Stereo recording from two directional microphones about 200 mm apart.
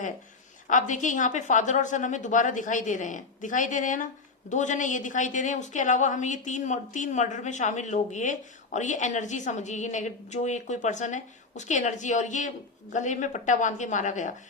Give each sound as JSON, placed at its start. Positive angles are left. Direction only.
{"t": 0.7, "sound": "a woman's voice", "side_deg": 40}